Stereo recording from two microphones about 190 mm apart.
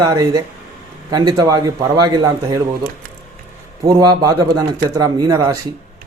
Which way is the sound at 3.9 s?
20° right (ahead or behind).